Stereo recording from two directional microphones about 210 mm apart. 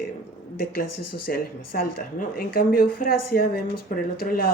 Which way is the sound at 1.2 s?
45° left (ahead or behind).